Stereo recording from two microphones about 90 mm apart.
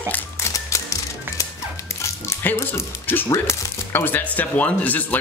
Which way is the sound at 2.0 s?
25° left (ahead or behind).